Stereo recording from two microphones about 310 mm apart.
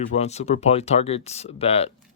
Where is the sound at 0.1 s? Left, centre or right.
Left.